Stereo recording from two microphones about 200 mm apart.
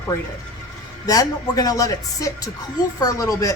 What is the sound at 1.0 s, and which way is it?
A woman's voice, 15° left (ahead or behind).